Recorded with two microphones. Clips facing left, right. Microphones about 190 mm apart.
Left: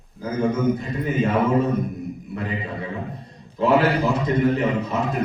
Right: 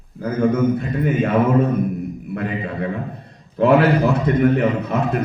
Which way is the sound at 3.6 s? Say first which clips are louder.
Right 4 dB; 60° right (ahead or behind).